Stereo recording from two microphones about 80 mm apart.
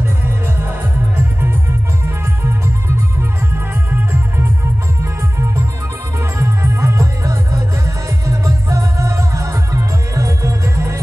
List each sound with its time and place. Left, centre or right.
6.3 s music: right